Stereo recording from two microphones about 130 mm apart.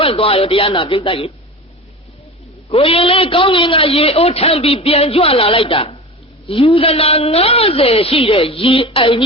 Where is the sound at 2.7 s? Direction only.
45° left (ahead or behind).